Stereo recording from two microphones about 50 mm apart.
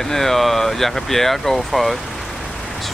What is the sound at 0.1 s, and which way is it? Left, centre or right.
Speech, centre.